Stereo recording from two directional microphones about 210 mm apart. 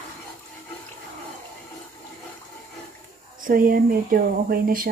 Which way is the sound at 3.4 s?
40° right (ahead or behind).